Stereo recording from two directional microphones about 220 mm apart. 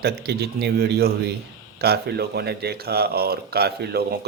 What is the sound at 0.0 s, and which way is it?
Speech, 45° right (ahead or behind).